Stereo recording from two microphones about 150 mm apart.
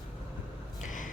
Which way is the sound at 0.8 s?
60° left (ahead or behind).